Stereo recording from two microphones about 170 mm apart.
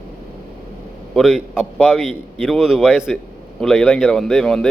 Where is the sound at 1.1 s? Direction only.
5° right (ahead or behind).